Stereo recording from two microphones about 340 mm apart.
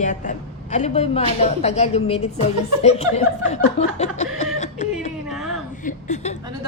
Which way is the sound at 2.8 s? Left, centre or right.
Centre.